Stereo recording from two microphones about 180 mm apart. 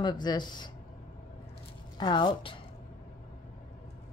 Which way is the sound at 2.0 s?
25° left (ahead or behind).